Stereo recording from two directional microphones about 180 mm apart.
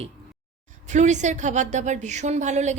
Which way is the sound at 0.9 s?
40° right (ahead or behind).